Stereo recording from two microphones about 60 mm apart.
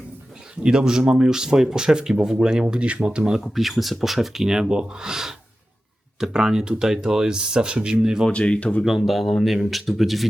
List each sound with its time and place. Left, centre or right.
0.6 s speech: centre
8.3 s speech: centre
8.8 s speech: centre